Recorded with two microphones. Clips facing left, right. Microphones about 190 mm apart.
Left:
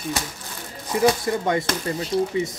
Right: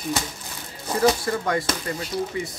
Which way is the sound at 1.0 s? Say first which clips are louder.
Left 1 dB; 20° left (ahead or behind).